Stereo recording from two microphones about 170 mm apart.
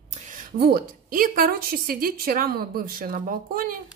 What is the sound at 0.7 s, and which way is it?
A woman's voice, 55° right (ahead or behind).